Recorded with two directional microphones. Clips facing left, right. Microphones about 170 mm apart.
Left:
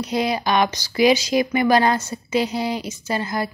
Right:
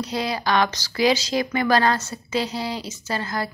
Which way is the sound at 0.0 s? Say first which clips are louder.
Left 3 dB; 15° left (ahead or behind).